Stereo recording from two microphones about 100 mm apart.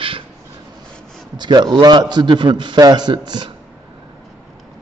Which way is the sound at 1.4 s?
50° right (ahead or behind).